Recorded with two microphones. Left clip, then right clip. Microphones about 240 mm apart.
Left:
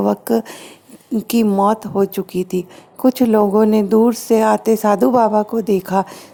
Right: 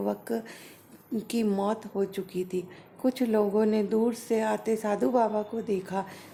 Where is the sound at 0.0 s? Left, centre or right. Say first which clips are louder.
Left 14 dB; left.